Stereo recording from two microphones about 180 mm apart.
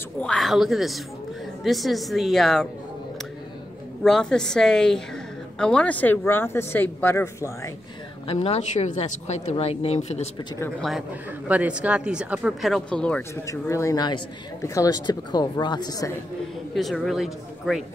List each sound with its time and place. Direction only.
0.2 s speech: 5° left (ahead or behind)
4.0 s speech: 5° left (ahead or behind)
8.3 s speech: 35° left (ahead or behind)
10.8 s speech: centre (ahead or behind)
13.5 s speech: 15° left (ahead or behind)
16.7 s speech: centre (ahead or behind)